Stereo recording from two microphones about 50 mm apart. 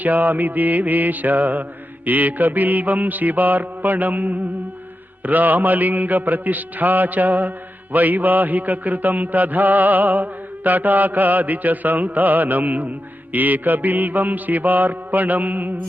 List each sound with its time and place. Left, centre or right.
0.0 s mantra: right